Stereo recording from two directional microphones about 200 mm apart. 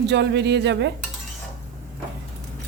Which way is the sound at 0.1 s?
60° right (ahead or behind).